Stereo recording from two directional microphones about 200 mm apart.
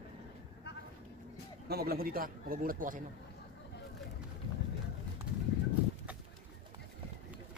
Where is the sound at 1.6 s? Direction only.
50° right (ahead or behind).